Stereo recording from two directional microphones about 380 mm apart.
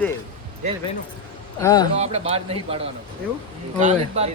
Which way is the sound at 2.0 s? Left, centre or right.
Centre.